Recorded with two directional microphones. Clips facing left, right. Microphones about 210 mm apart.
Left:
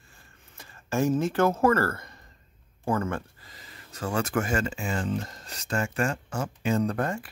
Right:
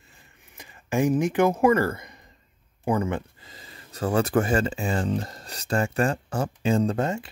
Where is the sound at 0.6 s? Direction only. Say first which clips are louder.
Right 2 dB; 15° right (ahead or behind).